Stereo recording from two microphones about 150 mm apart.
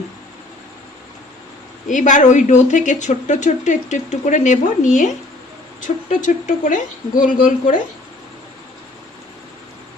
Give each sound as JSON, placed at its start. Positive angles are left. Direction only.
{"t": 1.9, "sound": "speech", "side_deg": 55}